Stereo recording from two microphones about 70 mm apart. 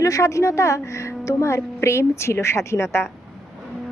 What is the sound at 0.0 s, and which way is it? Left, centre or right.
A woman's voice, left.